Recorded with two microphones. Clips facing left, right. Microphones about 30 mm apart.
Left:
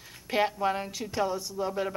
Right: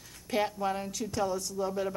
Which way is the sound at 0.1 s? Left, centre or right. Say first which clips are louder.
Left 3 dB; left.